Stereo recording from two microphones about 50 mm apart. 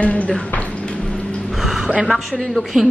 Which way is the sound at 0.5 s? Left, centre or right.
Left.